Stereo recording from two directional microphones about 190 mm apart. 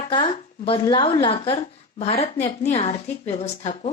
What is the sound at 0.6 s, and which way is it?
A woman's voice, 25° left (ahead or behind).